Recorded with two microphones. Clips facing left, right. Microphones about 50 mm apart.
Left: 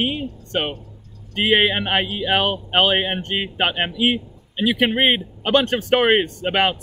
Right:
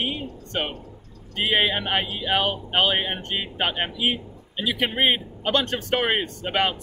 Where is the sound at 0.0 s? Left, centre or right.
Left.